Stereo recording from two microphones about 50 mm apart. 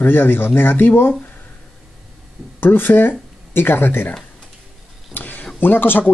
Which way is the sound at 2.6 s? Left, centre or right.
Left.